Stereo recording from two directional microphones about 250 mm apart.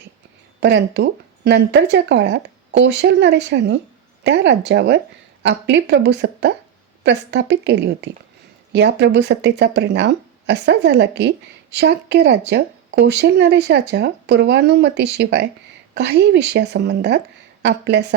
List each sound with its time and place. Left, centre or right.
0.6 s speech: right